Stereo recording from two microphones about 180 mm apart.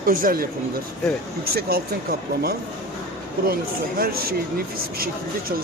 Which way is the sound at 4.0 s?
55° right (ahead or behind).